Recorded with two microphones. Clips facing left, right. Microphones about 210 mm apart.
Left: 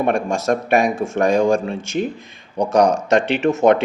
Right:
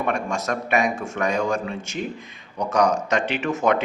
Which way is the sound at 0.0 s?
30° left (ahead or behind).